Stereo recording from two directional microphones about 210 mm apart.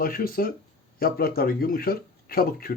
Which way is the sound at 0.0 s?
45° left (ahead or behind).